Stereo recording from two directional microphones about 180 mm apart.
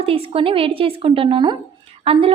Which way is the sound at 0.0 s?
30° right (ahead or behind).